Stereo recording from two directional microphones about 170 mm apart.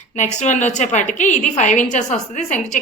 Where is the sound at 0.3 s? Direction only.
45° left (ahead or behind).